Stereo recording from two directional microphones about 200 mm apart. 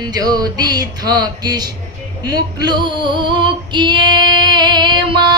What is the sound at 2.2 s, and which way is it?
Female singing, 20° right (ahead or behind).